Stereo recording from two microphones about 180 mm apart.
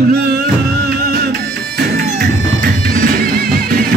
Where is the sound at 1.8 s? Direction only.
65° right (ahead or behind).